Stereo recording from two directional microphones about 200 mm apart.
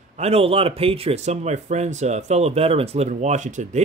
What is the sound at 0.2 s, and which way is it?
Speech, 30° right (ahead or behind).